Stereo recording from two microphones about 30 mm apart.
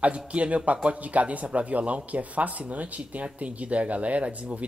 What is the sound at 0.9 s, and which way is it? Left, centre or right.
Speech, right.